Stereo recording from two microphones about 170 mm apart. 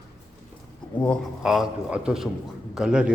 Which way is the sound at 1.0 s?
Centre (ahead or behind).